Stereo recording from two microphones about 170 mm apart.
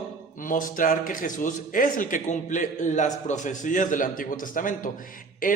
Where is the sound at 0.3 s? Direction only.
55° left (ahead or behind).